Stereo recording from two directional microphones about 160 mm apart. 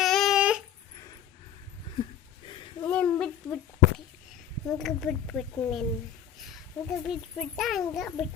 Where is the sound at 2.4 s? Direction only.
30° left (ahead or behind).